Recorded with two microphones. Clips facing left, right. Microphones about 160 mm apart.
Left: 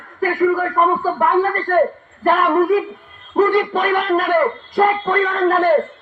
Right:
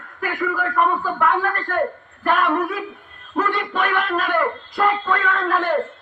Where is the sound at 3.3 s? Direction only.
40° left (ahead or behind).